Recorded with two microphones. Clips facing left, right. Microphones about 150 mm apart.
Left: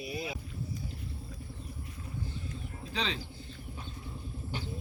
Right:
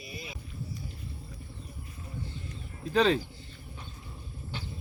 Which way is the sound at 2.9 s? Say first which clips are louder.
Right 12 dB; 50° right (ahead or behind).